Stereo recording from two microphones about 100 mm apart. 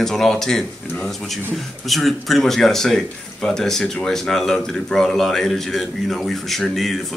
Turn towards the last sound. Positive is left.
turn(degrees=0)  # may be behind; listen again after turning